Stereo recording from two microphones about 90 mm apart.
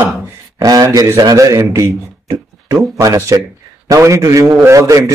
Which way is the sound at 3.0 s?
35° right (ahead or behind).